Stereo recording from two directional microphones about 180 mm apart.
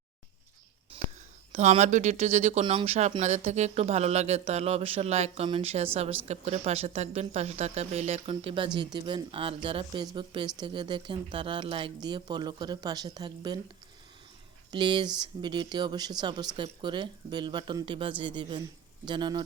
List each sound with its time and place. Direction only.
0.9 s whispering: 30° right (ahead or behind)
1.5 s speech: 40° right (ahead or behind); by 13.6 s 25° right (ahead or behind)
14.7 s speech: 25° right (ahead or behind)